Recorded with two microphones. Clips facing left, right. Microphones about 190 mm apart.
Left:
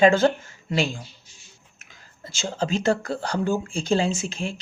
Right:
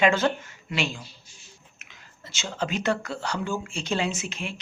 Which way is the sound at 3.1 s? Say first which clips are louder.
Left 5 dB; 40° left (ahead or behind).